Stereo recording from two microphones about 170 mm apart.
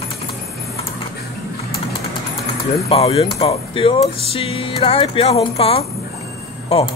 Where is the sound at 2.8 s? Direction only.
35° left (ahead or behind).